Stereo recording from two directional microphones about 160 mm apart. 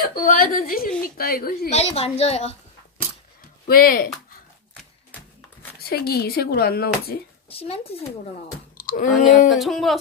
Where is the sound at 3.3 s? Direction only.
65° left (ahead or behind).